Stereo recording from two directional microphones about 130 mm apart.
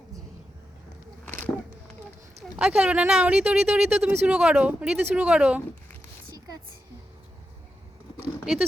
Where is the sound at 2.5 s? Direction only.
10° right (ahead or behind).